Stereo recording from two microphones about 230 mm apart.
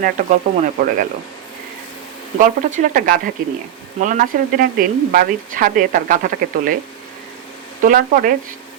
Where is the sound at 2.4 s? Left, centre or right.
Right.